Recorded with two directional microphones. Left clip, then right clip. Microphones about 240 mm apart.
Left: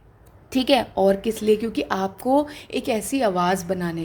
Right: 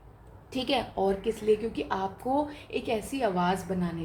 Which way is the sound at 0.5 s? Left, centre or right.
Left.